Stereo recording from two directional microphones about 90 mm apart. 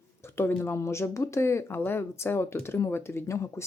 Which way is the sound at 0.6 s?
30° left (ahead or behind).